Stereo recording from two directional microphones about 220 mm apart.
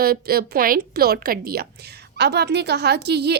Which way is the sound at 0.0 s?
45° right (ahead or behind).